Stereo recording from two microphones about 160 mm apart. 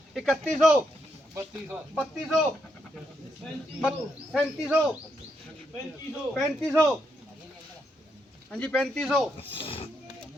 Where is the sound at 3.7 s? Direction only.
5° right (ahead or behind).